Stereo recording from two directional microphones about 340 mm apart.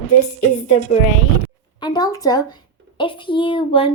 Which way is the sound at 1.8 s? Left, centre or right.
Centre.